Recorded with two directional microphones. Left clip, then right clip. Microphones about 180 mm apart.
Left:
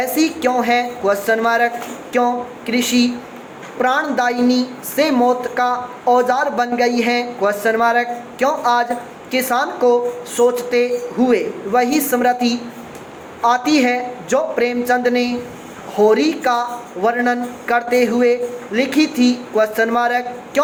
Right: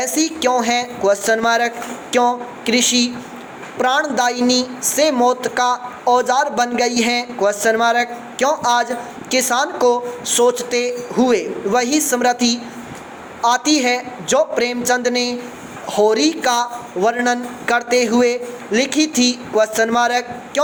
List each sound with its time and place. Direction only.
0.0 s speech: 40° right (ahead or behind)